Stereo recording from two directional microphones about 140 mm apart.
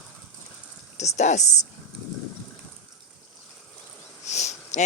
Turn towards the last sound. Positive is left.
turn(degrees=55)  # may be behind; listen again after turning